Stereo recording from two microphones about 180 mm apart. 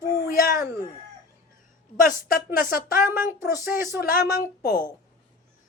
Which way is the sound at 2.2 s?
50° left (ahead or behind).